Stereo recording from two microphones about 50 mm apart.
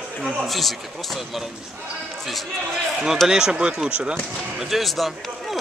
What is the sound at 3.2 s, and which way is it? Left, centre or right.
Speech, centre.